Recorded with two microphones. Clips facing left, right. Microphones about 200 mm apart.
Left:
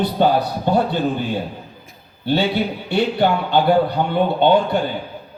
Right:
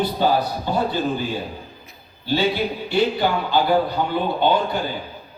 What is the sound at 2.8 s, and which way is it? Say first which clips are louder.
A man's voice: left 2 dB; 60° left (ahead or behind).